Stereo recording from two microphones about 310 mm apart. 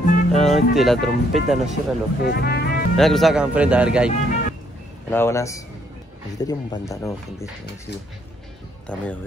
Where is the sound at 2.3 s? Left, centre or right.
Left.